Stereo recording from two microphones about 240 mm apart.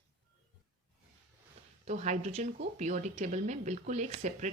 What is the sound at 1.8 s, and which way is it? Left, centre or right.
A woman's voice, right.